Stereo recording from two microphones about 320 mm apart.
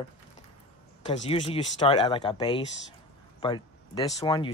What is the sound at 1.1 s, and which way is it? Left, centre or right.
Speech, centre.